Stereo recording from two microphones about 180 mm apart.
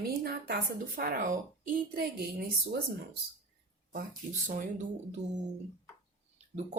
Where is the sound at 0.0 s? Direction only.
60° right (ahead or behind).